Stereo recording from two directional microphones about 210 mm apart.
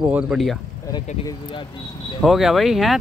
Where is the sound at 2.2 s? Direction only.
Centre (ahead or behind).